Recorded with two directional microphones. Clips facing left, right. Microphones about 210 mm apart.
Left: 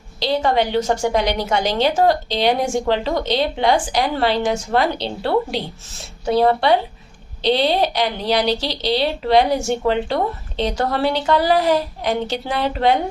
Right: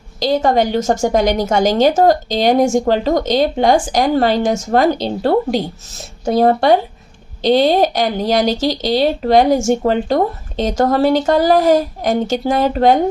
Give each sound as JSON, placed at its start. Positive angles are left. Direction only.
{"t": 0.2, "sound": "a woman's voice", "side_deg": -45}